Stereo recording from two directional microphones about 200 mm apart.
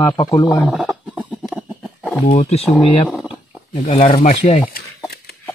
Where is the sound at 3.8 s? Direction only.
30° left (ahead or behind).